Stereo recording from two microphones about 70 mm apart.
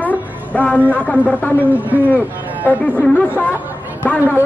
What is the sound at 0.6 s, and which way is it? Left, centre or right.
Speech, left.